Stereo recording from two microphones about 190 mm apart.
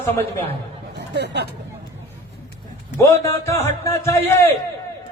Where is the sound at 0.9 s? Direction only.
60° right (ahead or behind).